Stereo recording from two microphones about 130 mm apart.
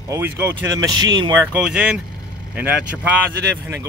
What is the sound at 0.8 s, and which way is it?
Speech, 35° right (ahead or behind).